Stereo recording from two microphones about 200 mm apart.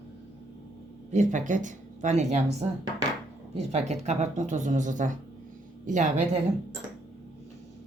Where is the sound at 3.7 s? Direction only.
35° right (ahead or behind).